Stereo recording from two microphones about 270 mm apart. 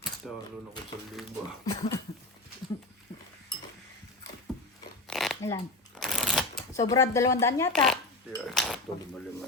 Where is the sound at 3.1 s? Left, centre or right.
Centre.